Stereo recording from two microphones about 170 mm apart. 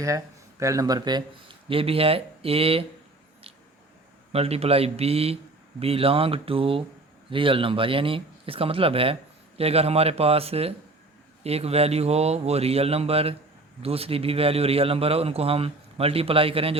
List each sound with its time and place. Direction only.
0.6 s a man's voice: 20° right (ahead or behind); by 2.8 s 35° right (ahead or behind)
4.3 s a man's voice: 35° right (ahead or behind)